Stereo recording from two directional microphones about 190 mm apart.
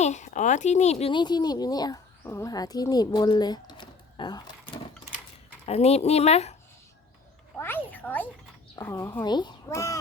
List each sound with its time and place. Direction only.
0.0 s speech: 40° left (ahead or behind); by 4.5 s 20° left (ahead or behind)
5.6 s speech: 35° left (ahead or behind)
7.5 s a sound: 10° left (ahead or behind)
8.8 s speech: 15° left (ahead or behind)